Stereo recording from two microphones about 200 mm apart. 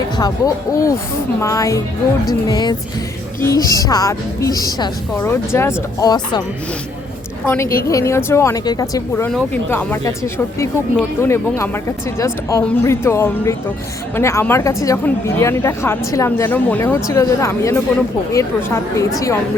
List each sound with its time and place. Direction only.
0.2 s a woman's voice: 20° left (ahead or behind)
7.4 s speech: 10° left (ahead or behind)